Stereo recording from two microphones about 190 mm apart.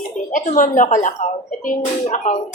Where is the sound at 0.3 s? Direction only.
40° left (ahead or behind).